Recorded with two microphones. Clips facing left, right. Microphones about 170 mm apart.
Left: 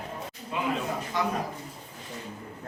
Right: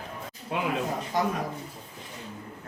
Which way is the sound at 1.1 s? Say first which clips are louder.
Right 2 dB; 45° right (ahead or behind).